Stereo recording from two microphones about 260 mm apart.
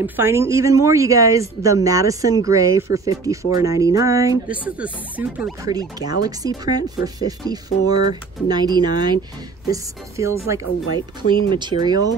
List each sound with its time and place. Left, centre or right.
0.0 s speech: centre